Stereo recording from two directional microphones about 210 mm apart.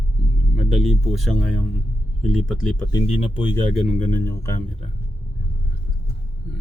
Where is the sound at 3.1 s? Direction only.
30° left (ahead or behind).